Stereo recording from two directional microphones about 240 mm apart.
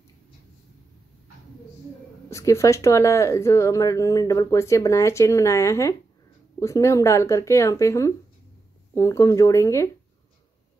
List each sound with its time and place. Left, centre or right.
2.2 s speech: centre